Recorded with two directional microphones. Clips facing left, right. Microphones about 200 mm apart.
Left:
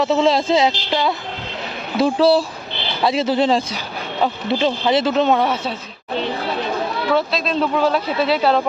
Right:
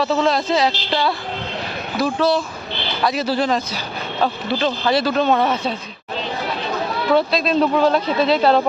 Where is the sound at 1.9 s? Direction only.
30° left (ahead or behind); by 5.7 s 10° left (ahead or behind).